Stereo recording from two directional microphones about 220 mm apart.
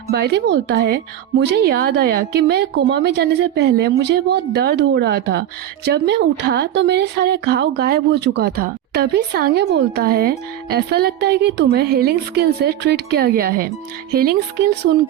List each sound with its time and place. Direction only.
0.1 s a woman's voice: 50° right (ahead or behind)